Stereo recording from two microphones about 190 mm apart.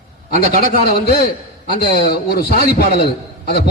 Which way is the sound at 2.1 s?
55° left (ahead or behind).